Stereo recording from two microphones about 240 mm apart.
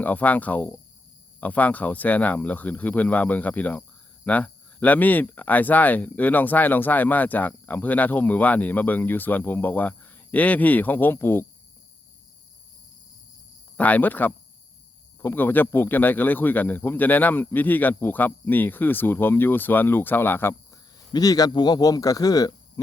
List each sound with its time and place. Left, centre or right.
0.0 s speech: centre
13.7 s speech: centre